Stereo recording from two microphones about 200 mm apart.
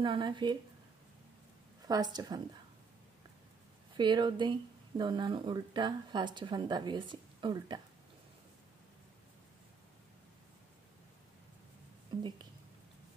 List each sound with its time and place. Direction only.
0.0 s speech: 25° right (ahead or behind)
1.9 s speech: 20° right (ahead or behind)
3.9 s speech: 20° right (ahead or behind)
12.2 s speech: 20° right (ahead or behind)